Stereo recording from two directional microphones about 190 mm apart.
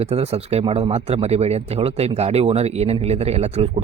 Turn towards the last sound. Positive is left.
turn(degrees=-35)  # may be behind; listen again after turning